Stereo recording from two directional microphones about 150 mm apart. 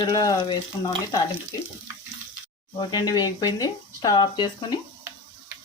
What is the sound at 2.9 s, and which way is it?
Speech, 25° left (ahead or behind).